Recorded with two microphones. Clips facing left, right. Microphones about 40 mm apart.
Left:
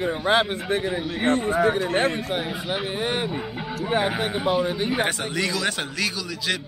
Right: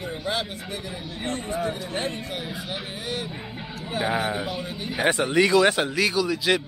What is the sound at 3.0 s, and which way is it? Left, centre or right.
Speech, left.